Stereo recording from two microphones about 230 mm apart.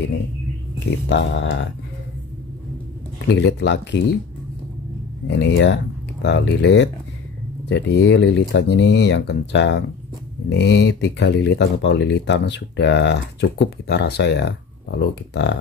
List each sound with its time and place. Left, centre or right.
1.0 s speech: left
3.3 s speech: left
5.3 s speech: left